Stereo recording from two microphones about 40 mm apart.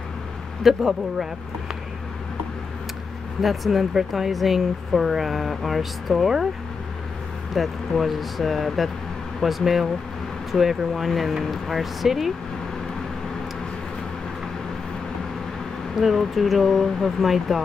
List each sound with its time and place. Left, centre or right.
0.7 s speech: centre
3.4 s speech: centre
7.5 s speech: centre
16.0 s speech: centre